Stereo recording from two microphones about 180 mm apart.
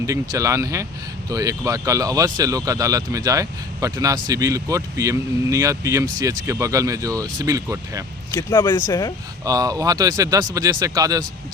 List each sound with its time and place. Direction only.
0.0 s speech: 20° right (ahead or behind)
8.3 s speech: 15° left (ahead or behind)
9.4 s speech: 20° right (ahead or behind)